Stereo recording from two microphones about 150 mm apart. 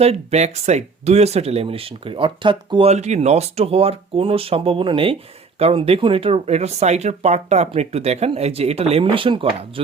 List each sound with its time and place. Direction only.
0.0 s speech: 45° right (ahead or behind)
2.9 s speech: 50° right (ahead or behind)